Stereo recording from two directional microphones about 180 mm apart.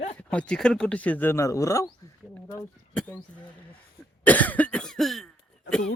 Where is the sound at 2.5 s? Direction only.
5° left (ahead or behind).